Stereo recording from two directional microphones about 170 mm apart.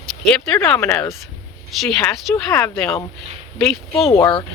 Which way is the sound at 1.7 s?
Centre (ahead or behind).